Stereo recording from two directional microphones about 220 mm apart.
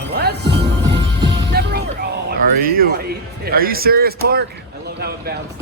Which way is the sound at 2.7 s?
45° right (ahead or behind).